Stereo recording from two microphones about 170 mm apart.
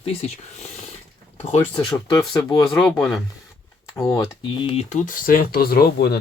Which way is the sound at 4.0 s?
15° left (ahead or behind).